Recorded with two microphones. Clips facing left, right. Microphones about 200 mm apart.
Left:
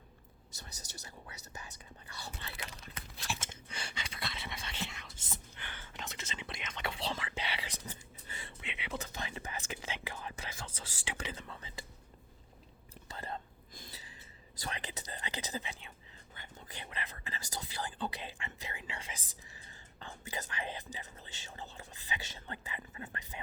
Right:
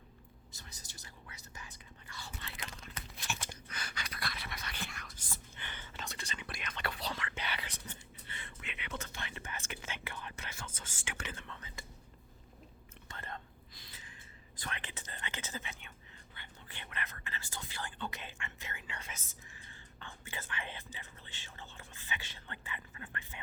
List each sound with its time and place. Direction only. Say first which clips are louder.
0.8 s speech: left 4 dB; 75° left (ahead or behind)
2.1 s whispering: left 2 dB; 40° left (ahead or behind)
3.2 s a sound: left 2 dB; 25° left (ahead or behind)
5.6 s whispering: even; 10° left (ahead or behind); by 11.9 s 35° left (ahead or behind)
13.1 s whispering: left 4 dB; 35° left (ahead or behind)
14.5 s a sound: left 3 dB; 40° left (ahead or behind)
16.3 s whispering: left 4 dB; 40° left (ahead or behind)